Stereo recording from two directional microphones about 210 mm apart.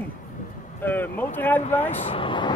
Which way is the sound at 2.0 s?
25° left (ahead or behind).